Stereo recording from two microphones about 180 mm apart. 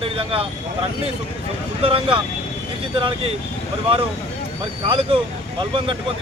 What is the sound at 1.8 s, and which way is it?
Speech, 30° right (ahead or behind).